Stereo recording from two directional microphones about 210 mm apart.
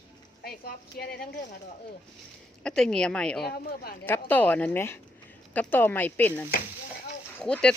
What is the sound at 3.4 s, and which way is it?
Speech, 50° left (ahead or behind).